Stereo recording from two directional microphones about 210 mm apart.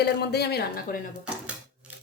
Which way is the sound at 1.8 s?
5° right (ahead or behind).